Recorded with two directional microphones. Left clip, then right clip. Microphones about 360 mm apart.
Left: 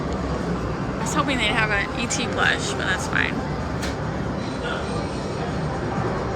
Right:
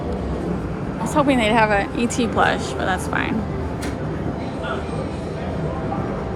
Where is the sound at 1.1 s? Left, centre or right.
Centre.